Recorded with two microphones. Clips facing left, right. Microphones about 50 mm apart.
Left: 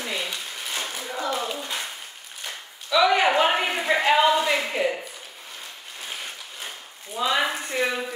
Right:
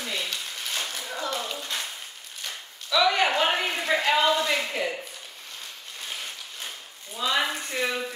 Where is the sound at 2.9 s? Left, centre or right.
Centre.